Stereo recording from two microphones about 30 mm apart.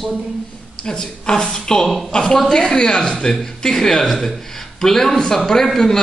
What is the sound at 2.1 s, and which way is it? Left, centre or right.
A woman's voice, left.